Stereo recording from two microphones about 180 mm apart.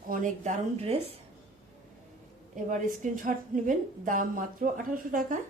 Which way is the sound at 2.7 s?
45° right (ahead or behind).